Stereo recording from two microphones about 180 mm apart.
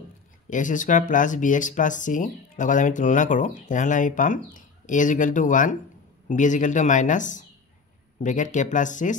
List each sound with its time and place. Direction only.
0.5 s speech: 45° left (ahead or behind)